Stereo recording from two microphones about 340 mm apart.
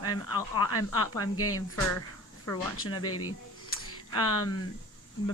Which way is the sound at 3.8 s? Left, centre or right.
Left.